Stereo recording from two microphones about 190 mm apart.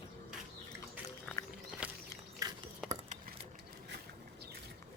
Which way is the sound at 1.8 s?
5° right (ahead or behind).